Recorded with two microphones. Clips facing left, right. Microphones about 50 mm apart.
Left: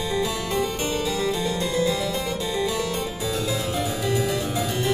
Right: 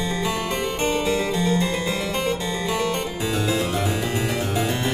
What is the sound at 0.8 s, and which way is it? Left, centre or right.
Harpsichord, right.